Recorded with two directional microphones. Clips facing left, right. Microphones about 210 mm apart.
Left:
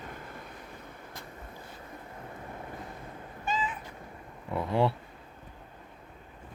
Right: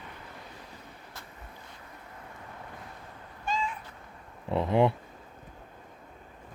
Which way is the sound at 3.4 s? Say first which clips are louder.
Even; 5° left (ahead or behind).